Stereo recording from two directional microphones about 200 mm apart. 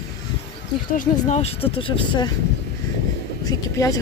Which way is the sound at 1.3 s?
30° left (ahead or behind).